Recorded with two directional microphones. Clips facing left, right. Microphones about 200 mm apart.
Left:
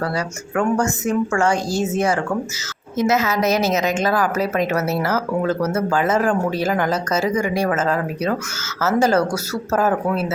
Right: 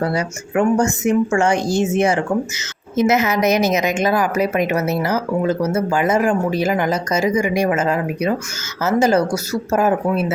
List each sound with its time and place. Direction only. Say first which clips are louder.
0.0 s a woman's voice: right 3 dB; 20° right (ahead or behind)